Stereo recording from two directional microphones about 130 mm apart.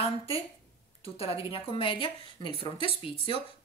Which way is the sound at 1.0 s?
50° left (ahead or behind).